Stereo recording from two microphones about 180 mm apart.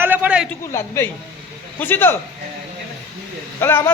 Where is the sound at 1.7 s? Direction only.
10° left (ahead or behind).